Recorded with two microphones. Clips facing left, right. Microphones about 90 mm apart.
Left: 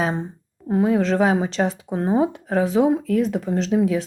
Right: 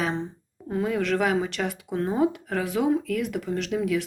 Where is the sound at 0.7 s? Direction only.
25° left (ahead or behind).